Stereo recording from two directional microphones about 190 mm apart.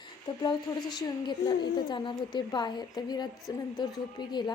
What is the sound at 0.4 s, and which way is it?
A woman's voice, 25° left (ahead or behind).